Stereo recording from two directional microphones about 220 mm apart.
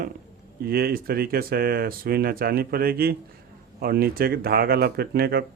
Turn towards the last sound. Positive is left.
turn(degrees=-45)  # may be behind; listen again after turning